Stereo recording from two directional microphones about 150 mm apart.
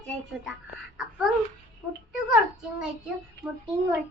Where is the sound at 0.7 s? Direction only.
Centre (ahead or behind).